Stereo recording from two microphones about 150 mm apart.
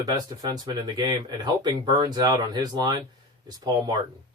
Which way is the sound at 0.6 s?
30° right (ahead or behind).